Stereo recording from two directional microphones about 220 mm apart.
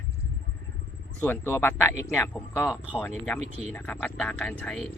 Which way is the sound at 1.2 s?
10° left (ahead or behind).